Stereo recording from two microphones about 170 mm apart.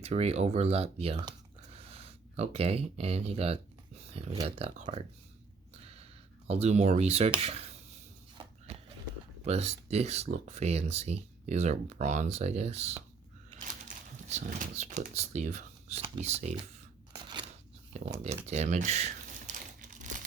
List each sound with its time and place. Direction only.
0.0 s speech: 40° right (ahead or behind)
5.7 s a sound: 35° right (ahead or behind)
6.5 s speech: 40° right (ahead or behind)
8.4 s a sound: 40° right (ahead or behind)
9.4 s speech: 40° right (ahead or behind)
17.9 s speech: 40° right (ahead or behind)
18.4 s crumpling: 40° right (ahead or behind)